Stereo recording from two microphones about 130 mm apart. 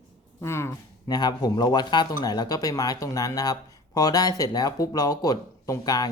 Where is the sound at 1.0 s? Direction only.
30° left (ahead or behind).